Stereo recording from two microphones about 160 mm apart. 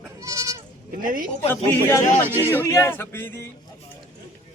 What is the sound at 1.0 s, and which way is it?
Speech, 60° right (ahead or behind).